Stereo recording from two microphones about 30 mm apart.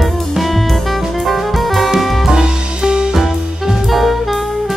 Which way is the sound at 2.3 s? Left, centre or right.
Right.